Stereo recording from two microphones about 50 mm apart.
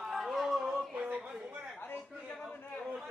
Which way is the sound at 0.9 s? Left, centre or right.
Right.